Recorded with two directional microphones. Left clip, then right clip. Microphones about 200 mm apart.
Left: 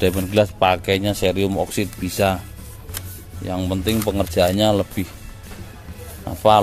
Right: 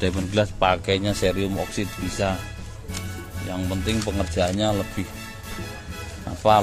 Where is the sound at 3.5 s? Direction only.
30° left (ahead or behind).